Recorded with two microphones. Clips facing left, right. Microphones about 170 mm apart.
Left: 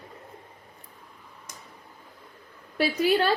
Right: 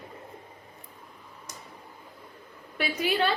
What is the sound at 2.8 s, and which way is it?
Speech, 40° left (ahead or behind).